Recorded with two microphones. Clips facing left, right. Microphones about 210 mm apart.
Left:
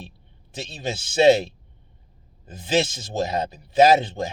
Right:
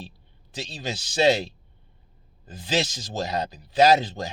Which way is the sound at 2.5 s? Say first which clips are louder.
Left 4 dB; 25° left (ahead or behind).